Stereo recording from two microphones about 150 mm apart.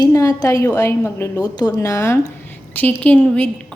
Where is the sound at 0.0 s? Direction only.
20° left (ahead or behind).